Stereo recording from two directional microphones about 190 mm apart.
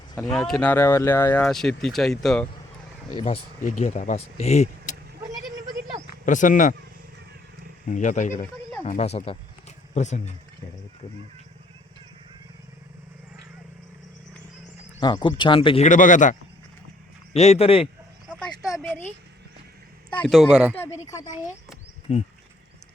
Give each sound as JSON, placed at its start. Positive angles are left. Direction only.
{"t": 0.2, "sound": "speech", "side_deg": 0}
{"t": 3.2, "sound": "speech", "side_deg": 30}
{"t": 6.2, "sound": "speech", "side_deg": 40}
{"t": 7.9, "sound": "speech", "side_deg": 40}
{"t": 15.0, "sound": "speech", "side_deg": 25}
{"t": 18.3, "sound": "a sound", "side_deg": 0}
{"t": 20.1, "sound": "speech", "side_deg": 5}
{"t": 20.7, "sound": "speech", "side_deg": 15}
{"t": 22.1, "sound": "speech", "side_deg": 30}